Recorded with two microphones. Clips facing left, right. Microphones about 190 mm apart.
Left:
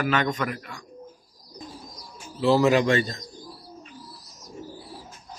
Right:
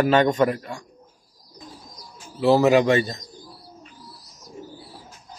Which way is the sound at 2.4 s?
15° right (ahead or behind).